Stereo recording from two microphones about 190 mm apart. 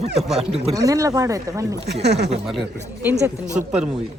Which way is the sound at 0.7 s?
20° right (ahead or behind).